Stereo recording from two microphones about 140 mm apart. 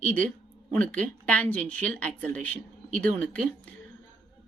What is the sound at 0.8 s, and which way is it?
Speech, 10° left (ahead or behind).